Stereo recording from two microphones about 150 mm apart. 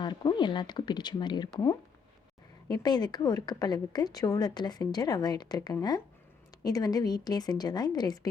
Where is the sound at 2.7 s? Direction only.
30° left (ahead or behind).